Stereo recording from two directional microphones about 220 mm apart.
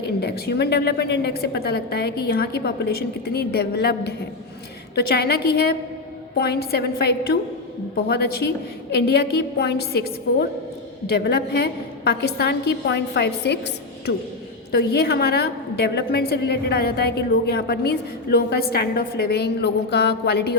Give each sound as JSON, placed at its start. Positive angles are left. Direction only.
{"t": 0.0, "sound": "a woman's voice", "side_deg": 45}
{"t": 11.1, "sound": "a woman's voice", "side_deg": 45}
{"t": 14.7, "sound": "a woman's voice", "side_deg": 50}